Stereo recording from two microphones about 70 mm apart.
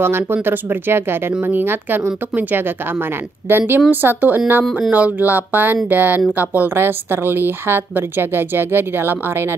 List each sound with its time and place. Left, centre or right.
0.0 s a woman's voice: right